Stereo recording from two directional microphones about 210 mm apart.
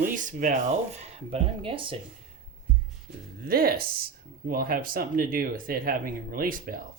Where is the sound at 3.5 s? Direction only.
45° right (ahead or behind).